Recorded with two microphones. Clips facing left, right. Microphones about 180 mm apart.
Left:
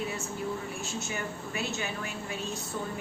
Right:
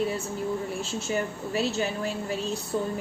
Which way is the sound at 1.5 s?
35° right (ahead or behind).